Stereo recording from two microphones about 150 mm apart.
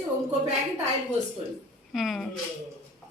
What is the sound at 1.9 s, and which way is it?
Speech, centre (ahead or behind).